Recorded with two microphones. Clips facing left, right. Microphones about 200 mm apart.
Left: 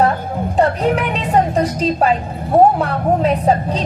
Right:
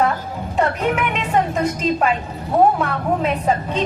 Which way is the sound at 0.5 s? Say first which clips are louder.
Left 4 dB; 35° left (ahead or behind).